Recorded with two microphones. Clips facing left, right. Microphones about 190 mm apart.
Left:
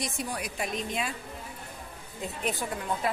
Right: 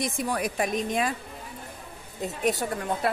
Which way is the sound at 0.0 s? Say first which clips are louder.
Right 6 dB; 55° right (ahead or behind).